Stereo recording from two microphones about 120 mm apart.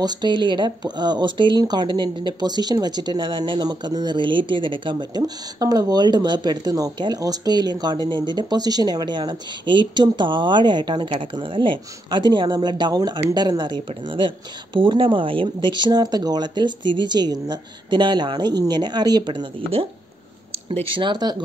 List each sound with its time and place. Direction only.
0.0 s speech: 35° right (ahead or behind)
20.9 s speech: 40° right (ahead or behind)